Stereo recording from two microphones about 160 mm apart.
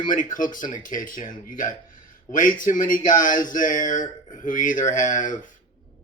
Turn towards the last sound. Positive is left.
turn(degrees=55)  # may be behind; listen again after turning